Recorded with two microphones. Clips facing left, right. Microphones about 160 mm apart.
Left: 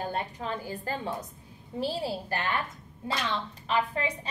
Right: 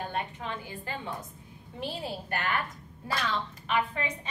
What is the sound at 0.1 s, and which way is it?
A woman's voice, 35° left (ahead or behind).